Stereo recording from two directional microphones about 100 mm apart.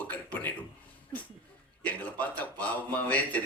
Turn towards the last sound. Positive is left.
turn(degrees=15)  # may be behind; listen again after turning